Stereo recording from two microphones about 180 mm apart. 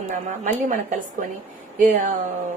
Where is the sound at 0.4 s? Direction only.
45° right (ahead or behind).